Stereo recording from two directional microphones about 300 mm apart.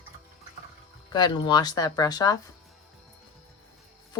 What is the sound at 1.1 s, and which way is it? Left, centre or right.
Speech, centre.